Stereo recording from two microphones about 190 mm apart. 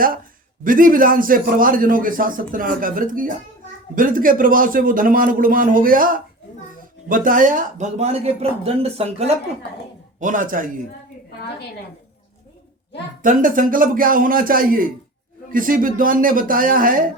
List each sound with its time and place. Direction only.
0.6 s a man's voice: 45° right (ahead or behind)
10.2 s a man's voice: 45° right (ahead or behind)
13.2 s a man's voice: 45° right (ahead or behind)